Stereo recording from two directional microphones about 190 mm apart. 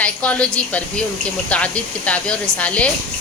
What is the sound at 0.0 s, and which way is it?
Speech, 5° left (ahead or behind).